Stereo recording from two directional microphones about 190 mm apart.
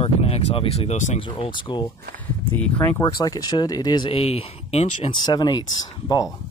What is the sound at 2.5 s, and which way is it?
Speech, 10° left (ahead or behind).